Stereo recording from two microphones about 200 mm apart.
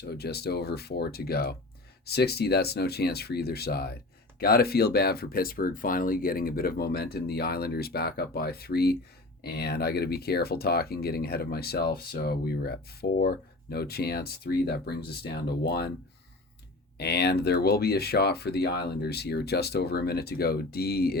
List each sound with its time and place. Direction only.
0.0 s speech: 50° left (ahead or behind)
17.0 s speech: 55° left (ahead or behind)